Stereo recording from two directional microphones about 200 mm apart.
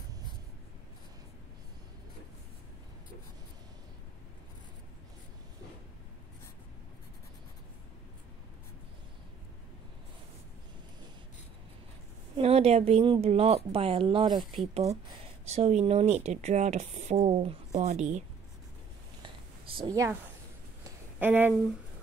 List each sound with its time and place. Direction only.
12.4 s a woman's voice: 30° right (ahead or behind)
14.4 s speech: centre (ahead or behind)
15.5 s speech: 30° right (ahead or behind)
19.2 s a sound: 25° right (ahead or behind); by 21.5 s 10° right (ahead or behind)